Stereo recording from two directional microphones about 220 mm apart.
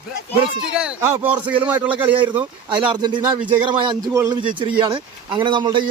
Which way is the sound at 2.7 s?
20° right (ahead or behind).